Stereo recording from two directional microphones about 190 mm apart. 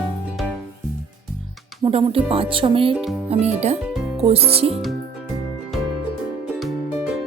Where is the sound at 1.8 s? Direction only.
30° right (ahead or behind).